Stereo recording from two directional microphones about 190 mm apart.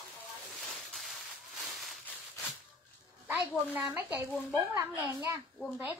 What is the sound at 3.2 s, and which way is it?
Speech, 10° right (ahead or behind).